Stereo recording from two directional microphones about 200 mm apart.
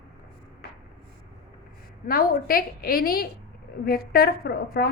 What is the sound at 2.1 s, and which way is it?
A woman's voice, 45° left (ahead or behind).